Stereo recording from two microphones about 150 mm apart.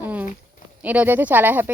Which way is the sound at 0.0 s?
10° right (ahead or behind).